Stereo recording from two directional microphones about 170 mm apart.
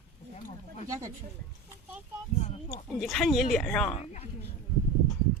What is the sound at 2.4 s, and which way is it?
Speech, 40° left (ahead or behind).